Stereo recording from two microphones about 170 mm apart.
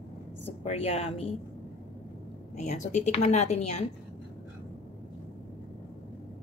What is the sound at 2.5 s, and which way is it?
A woman's voice, 45° left (ahead or behind).